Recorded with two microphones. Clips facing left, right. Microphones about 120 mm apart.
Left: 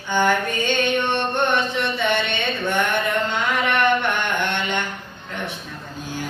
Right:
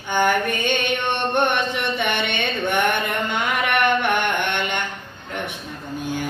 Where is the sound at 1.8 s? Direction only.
55° right (ahead or behind).